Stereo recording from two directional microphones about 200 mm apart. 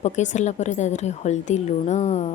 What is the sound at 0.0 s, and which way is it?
A woman's voice, 35° left (ahead or behind).